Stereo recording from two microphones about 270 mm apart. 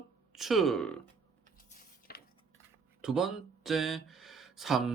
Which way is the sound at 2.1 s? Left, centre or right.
Left.